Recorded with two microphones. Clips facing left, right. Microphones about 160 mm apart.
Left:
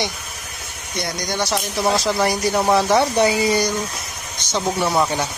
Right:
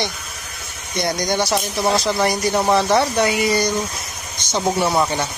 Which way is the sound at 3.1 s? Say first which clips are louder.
Left 1 dB; 30° left (ahead or behind).